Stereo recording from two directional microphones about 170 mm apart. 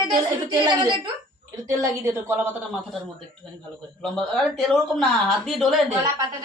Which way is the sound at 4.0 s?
Centre (ahead or behind).